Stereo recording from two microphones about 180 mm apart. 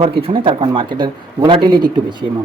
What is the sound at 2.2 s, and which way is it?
Speech, 40° right (ahead or behind).